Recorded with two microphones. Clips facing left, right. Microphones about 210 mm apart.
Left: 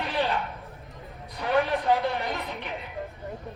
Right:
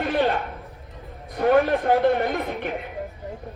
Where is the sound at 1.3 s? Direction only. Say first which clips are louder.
Right 7 dB; 50° right (ahead or behind).